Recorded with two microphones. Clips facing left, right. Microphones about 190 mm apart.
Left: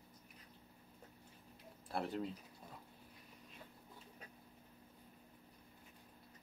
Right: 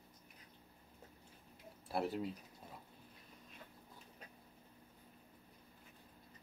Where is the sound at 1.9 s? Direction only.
5° right (ahead or behind).